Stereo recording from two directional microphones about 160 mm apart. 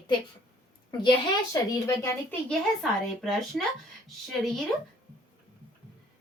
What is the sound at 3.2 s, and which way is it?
Speech, centre (ahead or behind).